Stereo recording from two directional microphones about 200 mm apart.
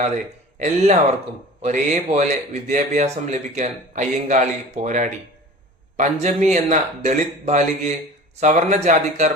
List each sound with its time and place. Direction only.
0.6 s speech: 35° right (ahead or behind)